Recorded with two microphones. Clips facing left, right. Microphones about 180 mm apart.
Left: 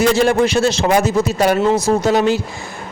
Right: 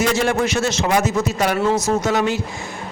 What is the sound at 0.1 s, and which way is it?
A man's voice, 30° left (ahead or behind).